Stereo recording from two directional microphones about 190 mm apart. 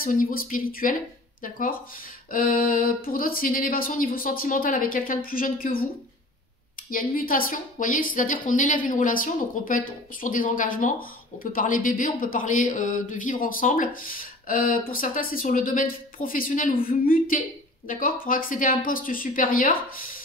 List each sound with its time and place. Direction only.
0.0 s a woman's voice: 50° left (ahead or behind)
6.9 s a woman's voice: 50° left (ahead or behind)